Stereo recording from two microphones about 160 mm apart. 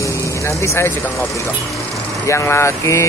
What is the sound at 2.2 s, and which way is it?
Speech, 15° left (ahead or behind).